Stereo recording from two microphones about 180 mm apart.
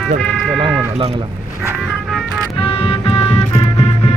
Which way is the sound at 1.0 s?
25° right (ahead or behind).